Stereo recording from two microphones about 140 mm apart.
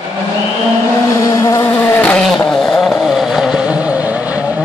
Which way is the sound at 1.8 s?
15° left (ahead or behind).